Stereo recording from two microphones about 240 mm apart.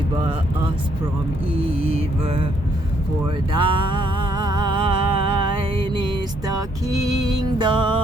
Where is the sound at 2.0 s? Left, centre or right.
Right.